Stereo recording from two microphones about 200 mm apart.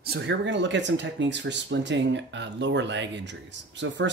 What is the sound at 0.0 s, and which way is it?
Speech, 55° right (ahead or behind).